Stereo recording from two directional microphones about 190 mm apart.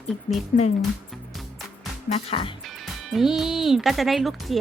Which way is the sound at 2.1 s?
30° left (ahead or behind).